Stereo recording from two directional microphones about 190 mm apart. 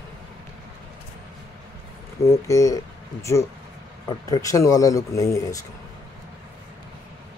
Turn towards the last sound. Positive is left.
turn(degrees=15)  # may be behind; listen again after turning